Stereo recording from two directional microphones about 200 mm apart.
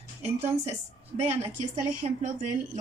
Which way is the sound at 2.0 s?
40° right (ahead or behind).